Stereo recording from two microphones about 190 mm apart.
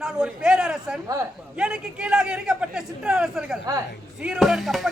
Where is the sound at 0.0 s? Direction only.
5° right (ahead or behind).